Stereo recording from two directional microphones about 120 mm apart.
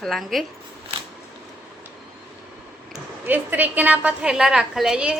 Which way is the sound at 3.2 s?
15° right (ahead or behind).